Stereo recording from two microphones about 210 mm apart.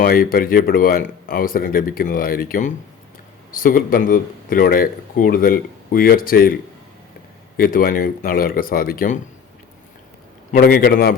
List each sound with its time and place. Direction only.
0.0 s speech: 45° left (ahead or behind)
7.5 s speech: 45° left (ahead or behind)
10.5 s speech: 45° left (ahead or behind)